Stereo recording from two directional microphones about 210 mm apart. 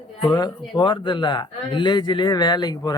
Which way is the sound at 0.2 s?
20° left (ahead or behind).